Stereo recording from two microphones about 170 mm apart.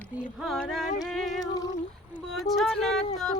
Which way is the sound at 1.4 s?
20° left (ahead or behind).